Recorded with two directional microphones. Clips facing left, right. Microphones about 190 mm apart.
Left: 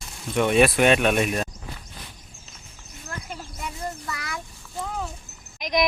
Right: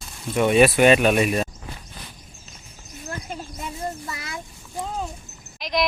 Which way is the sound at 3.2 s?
20° right (ahead or behind).